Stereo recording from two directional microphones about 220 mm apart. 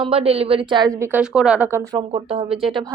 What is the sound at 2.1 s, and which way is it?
Speech, 25° right (ahead or behind).